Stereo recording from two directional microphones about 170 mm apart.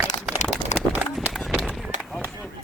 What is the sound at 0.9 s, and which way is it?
Horse, 10° right (ahead or behind).